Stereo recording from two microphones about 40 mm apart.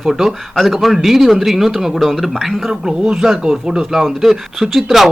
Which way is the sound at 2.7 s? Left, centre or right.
Centre.